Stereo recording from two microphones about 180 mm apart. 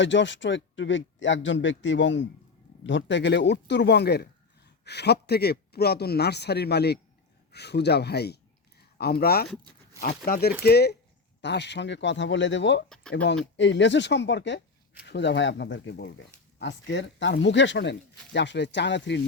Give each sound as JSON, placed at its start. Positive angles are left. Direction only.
{"t": 0.0, "sound": "a man's voice", "side_deg": 90}
{"t": 11.3, "sound": "speech", "side_deg": 75}
{"t": 12.9, "sound": "speech", "side_deg": 5}
{"t": 13.2, "sound": "speech", "side_deg": 80}